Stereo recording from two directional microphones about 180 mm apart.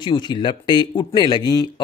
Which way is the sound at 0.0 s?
25° left (ahead or behind).